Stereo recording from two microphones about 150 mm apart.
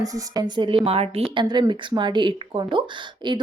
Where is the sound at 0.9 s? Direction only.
40° right (ahead or behind).